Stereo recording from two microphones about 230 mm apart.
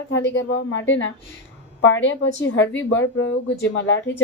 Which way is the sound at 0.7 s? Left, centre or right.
Left.